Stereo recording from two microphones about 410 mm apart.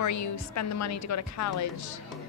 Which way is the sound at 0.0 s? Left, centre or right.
Left.